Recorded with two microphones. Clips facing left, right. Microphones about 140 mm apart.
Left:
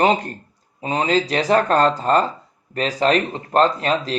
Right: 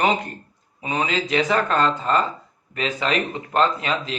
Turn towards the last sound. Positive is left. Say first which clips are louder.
# left 4 dB
turn(degrees=35)  # may be behind; listen again after turning